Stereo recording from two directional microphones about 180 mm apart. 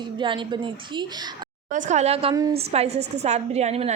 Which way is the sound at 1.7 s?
40° right (ahead or behind).